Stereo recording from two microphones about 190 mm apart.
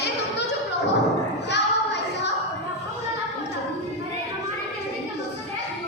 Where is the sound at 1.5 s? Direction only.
65° left (ahead or behind).